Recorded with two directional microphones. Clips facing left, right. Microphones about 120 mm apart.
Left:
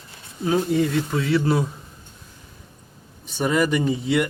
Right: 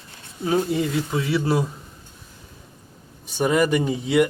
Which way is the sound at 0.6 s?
5° right (ahead or behind).